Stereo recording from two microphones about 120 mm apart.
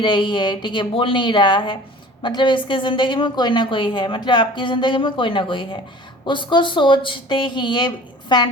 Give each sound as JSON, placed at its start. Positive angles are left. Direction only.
{"t": 0.0, "sound": "a woman's voice", "side_deg": 40}